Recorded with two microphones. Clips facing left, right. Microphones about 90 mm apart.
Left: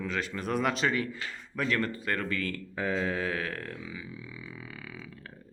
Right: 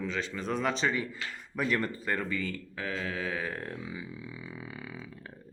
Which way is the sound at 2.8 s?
5° left (ahead or behind).